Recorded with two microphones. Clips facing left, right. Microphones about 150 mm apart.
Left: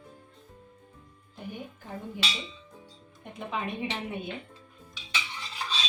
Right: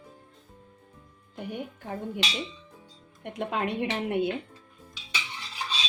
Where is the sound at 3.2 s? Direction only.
80° right.